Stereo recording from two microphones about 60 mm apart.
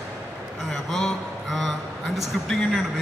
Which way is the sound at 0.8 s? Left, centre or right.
Centre.